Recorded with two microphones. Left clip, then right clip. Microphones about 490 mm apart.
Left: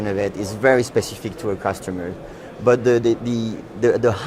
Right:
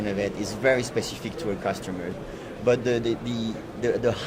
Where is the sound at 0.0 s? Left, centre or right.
Left.